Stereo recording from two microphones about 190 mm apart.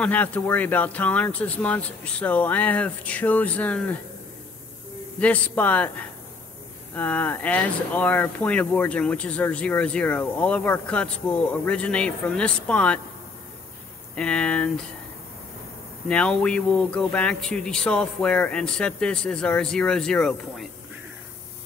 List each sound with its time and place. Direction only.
0.0 s speech: 10° left (ahead or behind)
5.2 s speech: 10° left (ahead or behind)
14.1 s speech: 5° left (ahead or behind)
16.1 s speech: 5° left (ahead or behind)